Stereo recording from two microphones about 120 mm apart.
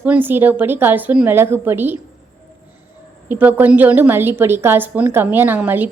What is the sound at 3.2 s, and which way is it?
Speech, 15° right (ahead or behind).